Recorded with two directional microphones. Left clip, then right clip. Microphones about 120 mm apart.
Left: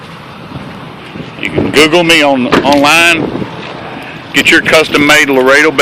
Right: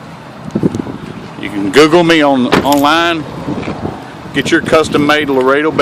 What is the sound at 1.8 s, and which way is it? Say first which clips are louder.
Speech: even; 60° right (ahead or behind).